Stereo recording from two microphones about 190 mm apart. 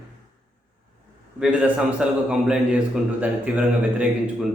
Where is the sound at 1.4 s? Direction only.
5° right (ahead or behind).